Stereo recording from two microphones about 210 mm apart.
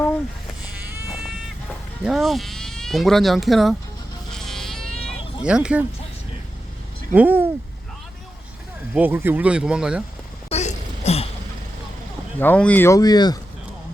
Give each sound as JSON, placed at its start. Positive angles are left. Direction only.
{"t": 0.6, "sound": "vehicle", "side_deg": -5}
{"t": 2.0, "sound": "speech", "side_deg": 0}
{"t": 4.3, "sound": "a sound", "side_deg": 0}
{"t": 7.1, "sound": "speech", "side_deg": -10}
{"t": 9.0, "sound": "speech", "side_deg": -10}
{"t": 10.5, "sound": "a sound", "side_deg": 30}
{"t": 12.4, "sound": "speech", "side_deg": 5}